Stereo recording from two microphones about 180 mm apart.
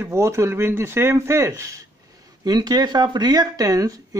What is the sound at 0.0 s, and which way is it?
Speech, 15° right (ahead or behind).